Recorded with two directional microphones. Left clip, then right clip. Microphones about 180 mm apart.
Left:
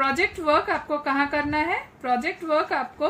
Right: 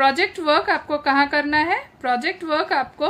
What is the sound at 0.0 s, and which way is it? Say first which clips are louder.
A woman's voice: right 4 dB; 50° right (ahead or behind).